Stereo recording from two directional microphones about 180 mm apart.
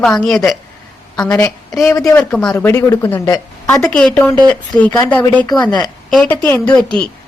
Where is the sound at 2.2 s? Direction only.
5° left (ahead or behind).